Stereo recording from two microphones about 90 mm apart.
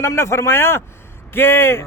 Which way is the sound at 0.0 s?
30° left (ahead or behind).